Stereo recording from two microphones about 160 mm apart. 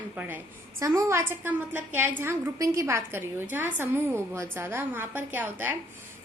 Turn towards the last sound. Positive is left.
turn(degrees=-15)  # may be behind; listen again after turning